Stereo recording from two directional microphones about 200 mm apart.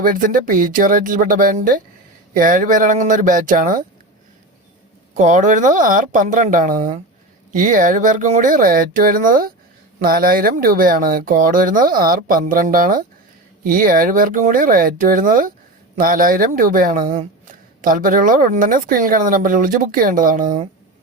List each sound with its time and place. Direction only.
0.0 s speech: 45° right (ahead or behind)
5.1 s speech: 35° right (ahead or behind)